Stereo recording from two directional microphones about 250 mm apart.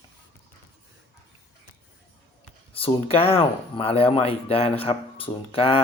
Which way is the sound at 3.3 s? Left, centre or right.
Left.